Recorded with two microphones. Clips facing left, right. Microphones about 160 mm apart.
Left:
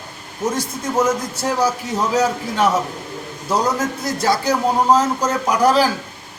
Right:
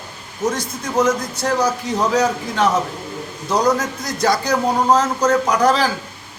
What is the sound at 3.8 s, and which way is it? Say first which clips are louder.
A man's voice: even; 5° left (ahead or behind).